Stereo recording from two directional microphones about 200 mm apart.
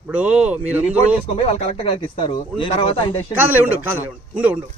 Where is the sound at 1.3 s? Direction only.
30° left (ahead or behind).